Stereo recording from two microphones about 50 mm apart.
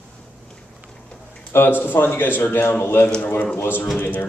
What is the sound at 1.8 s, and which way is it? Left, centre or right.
Speech, left.